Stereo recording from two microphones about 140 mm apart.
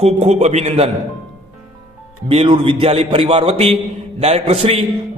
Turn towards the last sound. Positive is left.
turn(degrees=-45)  # may be behind; listen again after turning